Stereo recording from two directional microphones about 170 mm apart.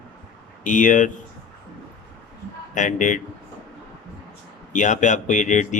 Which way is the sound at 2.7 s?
45° left (ahead or behind).